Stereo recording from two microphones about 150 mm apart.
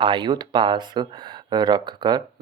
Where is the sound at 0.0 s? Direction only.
30° right (ahead or behind).